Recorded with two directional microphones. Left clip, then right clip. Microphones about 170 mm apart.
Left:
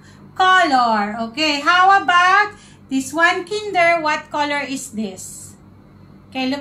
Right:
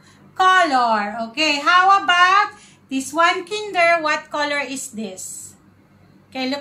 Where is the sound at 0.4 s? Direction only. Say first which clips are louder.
Left 1 dB; 20° right (ahead or behind).